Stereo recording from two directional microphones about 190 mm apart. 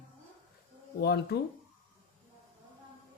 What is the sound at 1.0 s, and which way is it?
Speech, 60° left (ahead or behind).